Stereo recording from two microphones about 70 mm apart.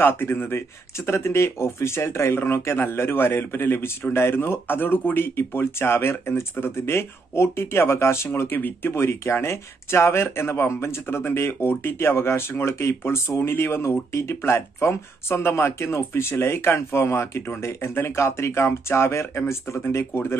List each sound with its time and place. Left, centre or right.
0.0 s speech: left